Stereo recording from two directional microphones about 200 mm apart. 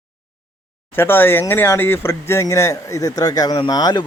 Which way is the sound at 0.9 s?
10° left (ahead or behind).